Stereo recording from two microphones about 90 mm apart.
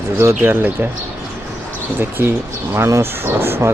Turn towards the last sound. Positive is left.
turn(degrees=-25)  # may be behind; listen again after turning